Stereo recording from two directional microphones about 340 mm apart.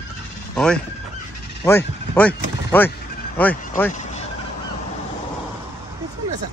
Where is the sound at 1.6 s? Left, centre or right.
Centre.